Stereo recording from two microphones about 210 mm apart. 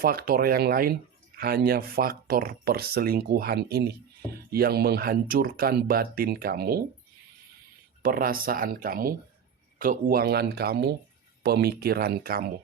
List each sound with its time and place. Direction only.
0.0 s speech: 45° right (ahead or behind)
8.0 s speech: 45° right (ahead or behind)